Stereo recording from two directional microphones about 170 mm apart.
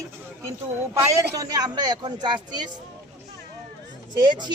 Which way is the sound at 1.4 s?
20° right (ahead or behind).